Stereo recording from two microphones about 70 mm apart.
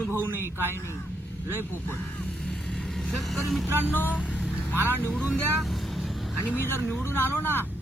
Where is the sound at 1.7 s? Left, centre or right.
Left.